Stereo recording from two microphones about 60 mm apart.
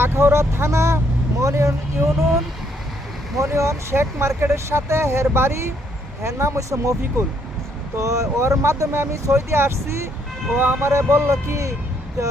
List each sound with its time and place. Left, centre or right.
0.0 s speech: right
1.4 s speech: right
3.3 s speech: right
7.9 s speech: right